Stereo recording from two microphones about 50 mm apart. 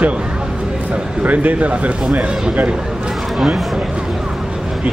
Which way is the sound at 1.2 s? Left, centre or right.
Right.